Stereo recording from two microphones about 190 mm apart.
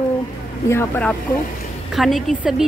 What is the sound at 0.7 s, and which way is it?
Speech, 10° left (ahead or behind).